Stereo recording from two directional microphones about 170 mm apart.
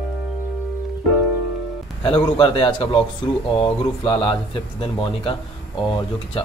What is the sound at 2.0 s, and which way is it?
Speech, 25° left (ahead or behind).